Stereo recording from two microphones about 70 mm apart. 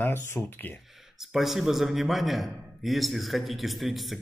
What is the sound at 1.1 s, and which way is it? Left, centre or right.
A man's voice, centre.